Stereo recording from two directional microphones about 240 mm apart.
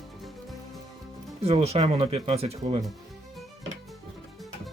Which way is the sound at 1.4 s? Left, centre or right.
Right.